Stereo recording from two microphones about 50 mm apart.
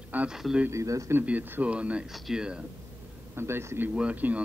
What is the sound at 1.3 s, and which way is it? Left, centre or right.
Speech, right.